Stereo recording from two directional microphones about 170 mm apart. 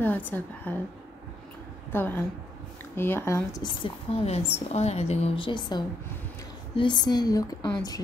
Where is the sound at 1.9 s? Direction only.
10° left (ahead or behind).